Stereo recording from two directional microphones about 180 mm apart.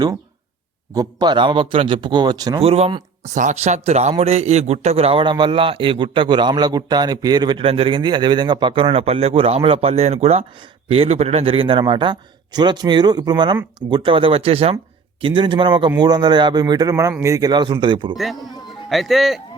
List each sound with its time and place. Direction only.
0.9 s a man's voice: 25° right (ahead or behind)
18.9 s speech: centre (ahead or behind)